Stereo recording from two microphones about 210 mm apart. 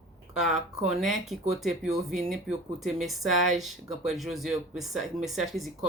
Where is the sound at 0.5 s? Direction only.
35° right (ahead or behind).